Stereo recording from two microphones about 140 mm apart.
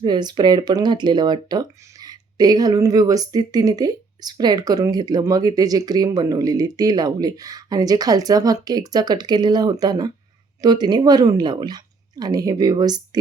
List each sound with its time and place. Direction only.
0.0 s speech: 30° right (ahead or behind)